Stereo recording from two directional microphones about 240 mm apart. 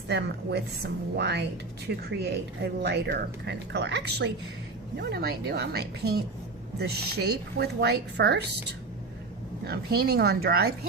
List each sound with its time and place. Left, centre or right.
0.1 s speech: right
9.6 s a woman's voice: right